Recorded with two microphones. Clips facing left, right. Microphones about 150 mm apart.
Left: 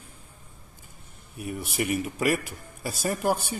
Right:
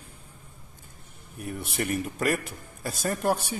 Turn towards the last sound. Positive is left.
turn(degrees=0)  # may be behind; listen again after turning